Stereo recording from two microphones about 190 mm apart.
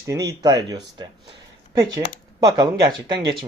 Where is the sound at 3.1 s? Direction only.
20° right (ahead or behind).